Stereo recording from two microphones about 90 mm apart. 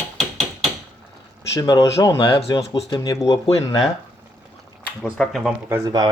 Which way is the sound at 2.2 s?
75° left (ahead or behind).